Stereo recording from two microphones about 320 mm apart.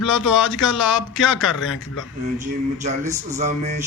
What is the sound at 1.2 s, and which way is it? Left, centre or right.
Speech, centre.